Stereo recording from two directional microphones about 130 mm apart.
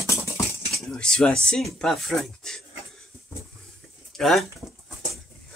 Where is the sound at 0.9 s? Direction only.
5° left (ahead or behind).